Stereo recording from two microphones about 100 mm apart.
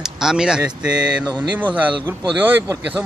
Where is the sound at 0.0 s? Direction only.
5° right (ahead or behind).